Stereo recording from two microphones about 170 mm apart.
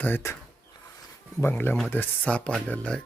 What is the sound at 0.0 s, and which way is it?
Speech, 15° left (ahead or behind).